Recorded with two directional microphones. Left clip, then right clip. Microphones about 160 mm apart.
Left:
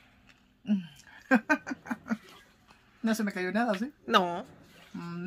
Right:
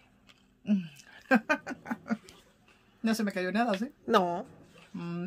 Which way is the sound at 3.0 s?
45° right (ahead or behind).